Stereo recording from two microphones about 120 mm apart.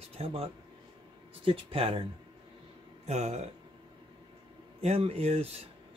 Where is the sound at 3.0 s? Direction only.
65° right (ahead or behind).